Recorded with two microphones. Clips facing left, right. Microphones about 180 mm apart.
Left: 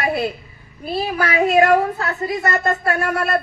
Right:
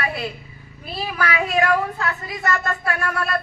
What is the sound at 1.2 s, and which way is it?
A woman's voice, 40° left (ahead or behind).